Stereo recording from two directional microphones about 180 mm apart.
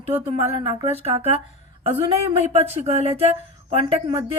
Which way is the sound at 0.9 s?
35° right (ahead or behind).